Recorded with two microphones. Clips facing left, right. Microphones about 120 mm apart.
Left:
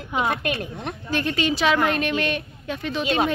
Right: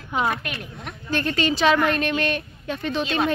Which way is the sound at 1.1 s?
10° left (ahead or behind).